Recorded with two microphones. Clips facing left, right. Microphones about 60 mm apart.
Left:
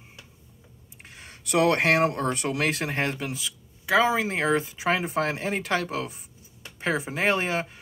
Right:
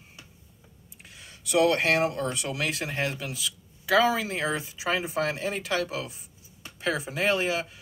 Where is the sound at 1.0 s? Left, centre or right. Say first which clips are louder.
Left 1 dB; left.